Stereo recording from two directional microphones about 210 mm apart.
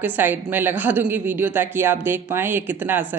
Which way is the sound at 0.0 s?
10° right (ahead or behind).